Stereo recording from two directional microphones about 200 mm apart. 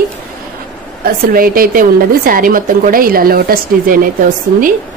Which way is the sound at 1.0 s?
45° right (ahead or behind).